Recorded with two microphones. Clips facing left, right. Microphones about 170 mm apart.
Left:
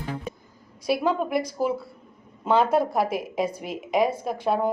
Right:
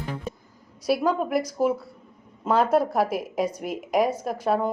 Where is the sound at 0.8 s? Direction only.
Centre (ahead or behind).